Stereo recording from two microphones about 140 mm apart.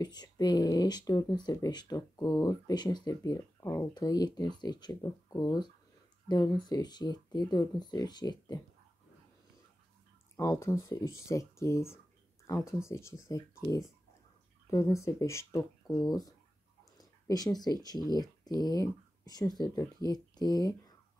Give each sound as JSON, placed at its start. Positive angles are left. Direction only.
{"t": 0.0, "sound": "speech", "side_deg": 30}
{"t": 10.3, "sound": "speech", "side_deg": 20}